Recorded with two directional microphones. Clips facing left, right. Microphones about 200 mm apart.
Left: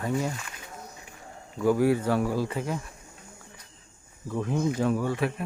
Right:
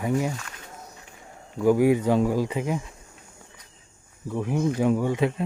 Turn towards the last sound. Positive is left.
turn(degrees=-20)  # may be behind; listen again after turning